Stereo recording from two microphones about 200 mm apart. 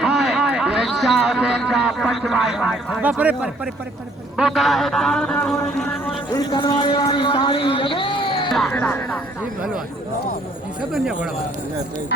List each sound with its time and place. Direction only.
0.0 s a man's voice: centre (ahead or behind)
5.6 s music: 5° left (ahead or behind)
6.3 s a man's voice: 20° left (ahead or behind)
8.4 s speech: centre (ahead or behind)
9.4 s a man's voice: centre (ahead or behind)
10.9 s a man's voice: 5° right (ahead or behind)